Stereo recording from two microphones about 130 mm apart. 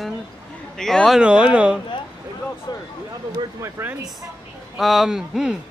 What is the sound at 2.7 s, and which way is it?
Speech, 30° left (ahead or behind).